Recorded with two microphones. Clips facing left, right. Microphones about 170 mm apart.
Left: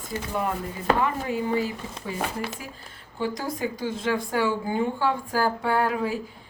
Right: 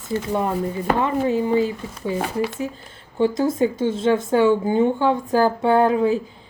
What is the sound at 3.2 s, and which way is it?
Speech, 25° right (ahead or behind).